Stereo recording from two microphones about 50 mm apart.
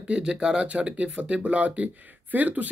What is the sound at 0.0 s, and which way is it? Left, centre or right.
Speech, right.